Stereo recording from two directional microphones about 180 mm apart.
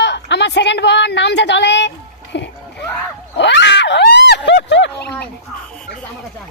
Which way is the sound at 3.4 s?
75° left (ahead or behind).